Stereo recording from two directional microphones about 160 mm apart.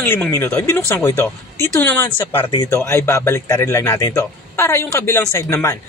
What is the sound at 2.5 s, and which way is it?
A man's voice, 25° left (ahead or behind).